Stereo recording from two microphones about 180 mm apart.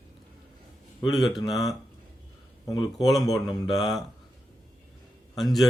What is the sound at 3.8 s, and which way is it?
Speech, centre (ahead or behind).